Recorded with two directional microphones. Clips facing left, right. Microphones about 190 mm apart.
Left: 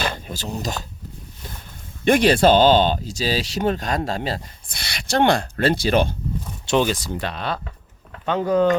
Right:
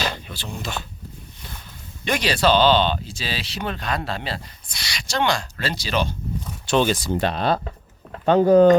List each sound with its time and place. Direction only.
0.0 s speech: 40° left (ahead or behind)
2.0 s speech: 50° left (ahead or behind)
6.7 s speech: 25° left (ahead or behind)
7.1 s speech: 25° right (ahead or behind)